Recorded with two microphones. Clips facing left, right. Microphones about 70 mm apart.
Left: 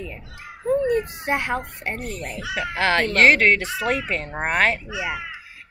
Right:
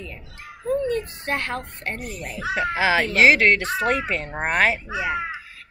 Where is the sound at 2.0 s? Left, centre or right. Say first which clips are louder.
Left 1 dB; centre.